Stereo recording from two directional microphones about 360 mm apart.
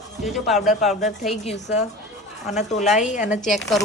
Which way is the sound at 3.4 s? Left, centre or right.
Centre.